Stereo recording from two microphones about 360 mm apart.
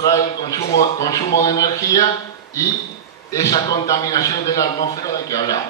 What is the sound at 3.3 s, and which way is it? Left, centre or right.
A man's voice, centre.